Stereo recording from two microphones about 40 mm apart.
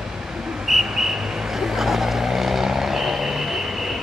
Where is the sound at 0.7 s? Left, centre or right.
Centre.